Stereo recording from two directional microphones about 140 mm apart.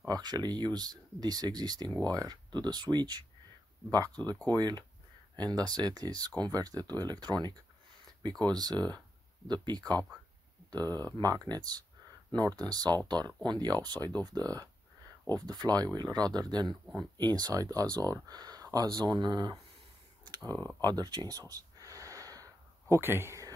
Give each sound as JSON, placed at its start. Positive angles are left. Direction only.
{"t": 0.1, "sound": "speech", "side_deg": -30}
{"t": 1.9, "sound": "speech", "side_deg": 10}
{"t": 2.1, "sound": "speech", "side_deg": -30}
{"t": 11.1, "sound": "speech", "side_deg": -30}
{"t": 16.8, "sound": "speech", "side_deg": 0}
{"t": 17.2, "sound": "speech", "side_deg": -30}
{"t": 20.2, "sound": "a sound", "side_deg": -30}
{"t": 20.8, "sound": "gasp", "side_deg": -30}